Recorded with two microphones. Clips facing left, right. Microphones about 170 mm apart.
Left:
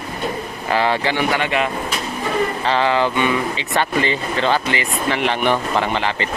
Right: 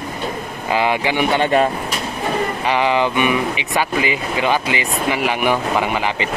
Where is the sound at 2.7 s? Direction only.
15° right (ahead or behind).